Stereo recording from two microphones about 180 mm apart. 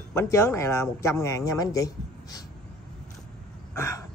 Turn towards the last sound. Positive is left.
turn(degrees=15)  # may be behind; listen again after turning